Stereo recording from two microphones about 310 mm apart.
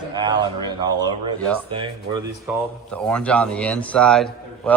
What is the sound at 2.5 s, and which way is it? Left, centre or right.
Speech, centre.